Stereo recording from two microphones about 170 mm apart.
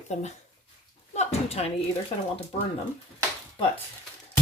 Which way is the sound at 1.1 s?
40° left (ahead or behind).